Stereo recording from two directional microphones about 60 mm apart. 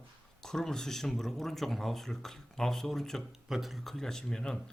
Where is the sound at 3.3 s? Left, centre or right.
Centre.